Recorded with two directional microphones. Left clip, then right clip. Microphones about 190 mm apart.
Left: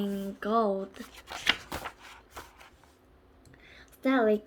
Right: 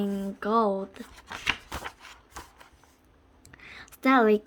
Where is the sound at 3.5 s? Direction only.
50° right (ahead or behind).